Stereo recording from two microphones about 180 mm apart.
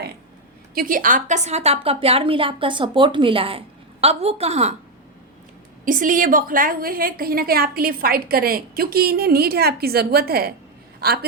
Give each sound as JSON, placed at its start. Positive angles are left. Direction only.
{"t": 0.7, "sound": "a woman's voice", "side_deg": -50}
{"t": 5.8, "sound": "a woman's voice", "side_deg": -50}